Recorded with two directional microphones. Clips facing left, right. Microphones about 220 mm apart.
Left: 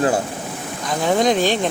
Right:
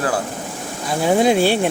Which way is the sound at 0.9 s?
10° right (ahead or behind).